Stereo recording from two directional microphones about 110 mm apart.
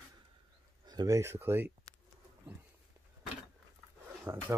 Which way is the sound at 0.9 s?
40° right (ahead or behind).